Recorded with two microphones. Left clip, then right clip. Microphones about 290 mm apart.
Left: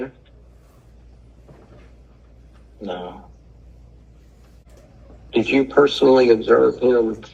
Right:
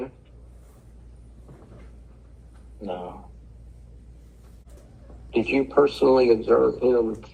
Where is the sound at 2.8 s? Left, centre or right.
Left.